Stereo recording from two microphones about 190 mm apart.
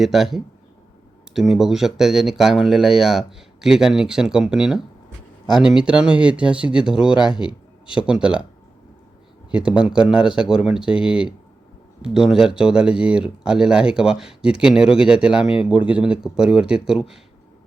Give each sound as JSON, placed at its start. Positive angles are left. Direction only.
{"t": 0.0, "sound": "speech", "side_deg": 0}
{"t": 9.5, "sound": "speech", "side_deg": -5}